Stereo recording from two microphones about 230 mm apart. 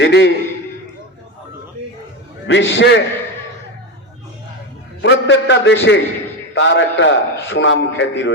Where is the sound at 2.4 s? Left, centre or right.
Left.